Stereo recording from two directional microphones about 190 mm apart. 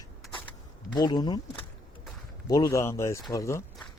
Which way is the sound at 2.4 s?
20° left (ahead or behind).